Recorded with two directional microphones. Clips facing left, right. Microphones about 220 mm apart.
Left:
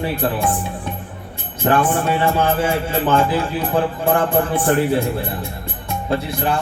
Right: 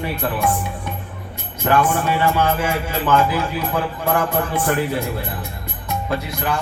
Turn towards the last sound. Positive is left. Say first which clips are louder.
# left 3 dB
turn(degrees=30)  # may be behind; listen again after turning